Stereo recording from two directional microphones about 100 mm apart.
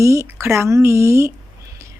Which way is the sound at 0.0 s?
30° right (ahead or behind).